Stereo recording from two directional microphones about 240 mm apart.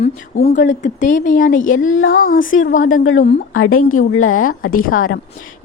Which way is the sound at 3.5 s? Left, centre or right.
Left.